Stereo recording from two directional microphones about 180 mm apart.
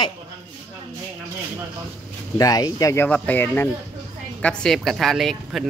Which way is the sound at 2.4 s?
20° left (ahead or behind).